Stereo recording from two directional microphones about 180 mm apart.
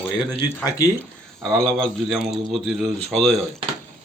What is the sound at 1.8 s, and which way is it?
Speech, centre (ahead or behind).